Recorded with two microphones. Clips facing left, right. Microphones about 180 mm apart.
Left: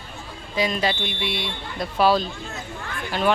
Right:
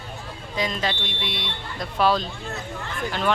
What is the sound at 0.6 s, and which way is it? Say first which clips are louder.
Speech: left 3 dB; 10° left (ahead or behind).